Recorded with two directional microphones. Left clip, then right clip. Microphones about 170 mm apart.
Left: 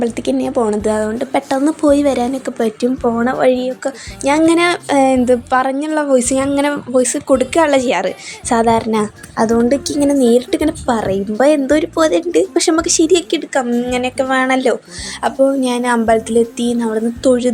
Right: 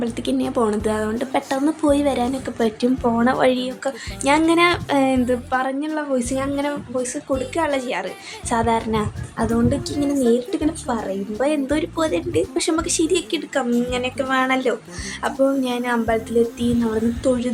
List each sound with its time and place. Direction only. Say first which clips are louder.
0.0 s speech: left 6 dB; 30° left (ahead or behind)
0.5 s speech: left 5 dB; 20° left (ahead or behind)
4.4 s speech: left 4 dB; 30° left (ahead or behind)
15.4 s speech: left 6 dB; 20° left (ahead or behind)
15.6 s speech: left 7 dB; 40° left (ahead or behind)
16.8 s speech: left 7 dB; 25° left (ahead or behind)